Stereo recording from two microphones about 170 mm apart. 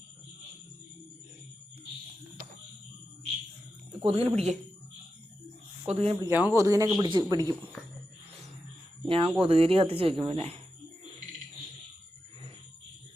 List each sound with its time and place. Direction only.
4.0 s speech: 35° right (ahead or behind)
5.8 s speech: 35° right (ahead or behind)
6.2 s a man's voice: 15° right (ahead or behind)
9.0 s speech: 35° right (ahead or behind)